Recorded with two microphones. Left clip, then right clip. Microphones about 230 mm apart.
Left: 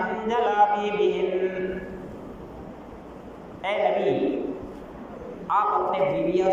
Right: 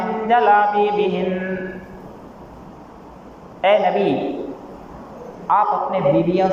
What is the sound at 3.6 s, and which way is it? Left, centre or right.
Speech, right.